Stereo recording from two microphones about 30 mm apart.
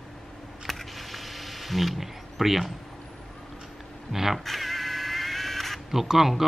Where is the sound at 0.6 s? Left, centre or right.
Centre.